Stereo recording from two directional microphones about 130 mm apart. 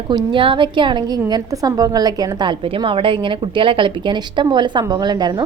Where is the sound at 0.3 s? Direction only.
40° right (ahead or behind).